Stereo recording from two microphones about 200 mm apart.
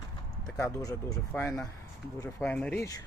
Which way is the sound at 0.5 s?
15° left (ahead or behind).